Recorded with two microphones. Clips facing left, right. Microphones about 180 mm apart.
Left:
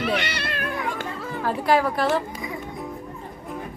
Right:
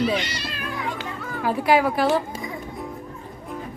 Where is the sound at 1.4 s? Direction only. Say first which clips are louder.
Right 2 dB; 5° right (ahead or behind).